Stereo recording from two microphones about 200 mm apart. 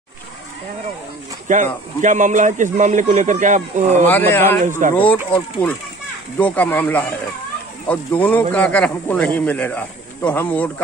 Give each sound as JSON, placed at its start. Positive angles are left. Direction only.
{"t": 1.5, "sound": "speech", "side_deg": -40}
{"t": 4.0, "sound": "a man's voice", "side_deg": 10}
{"t": 4.8, "sound": "speech", "side_deg": -40}
{"t": 5.3, "sound": "a man's voice", "side_deg": 10}